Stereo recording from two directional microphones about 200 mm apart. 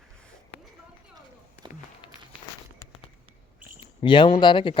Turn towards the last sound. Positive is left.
turn(degrees=25)  # may be behind; listen again after turning